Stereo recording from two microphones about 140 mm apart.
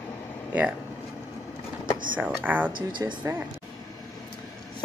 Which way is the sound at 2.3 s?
10° right (ahead or behind).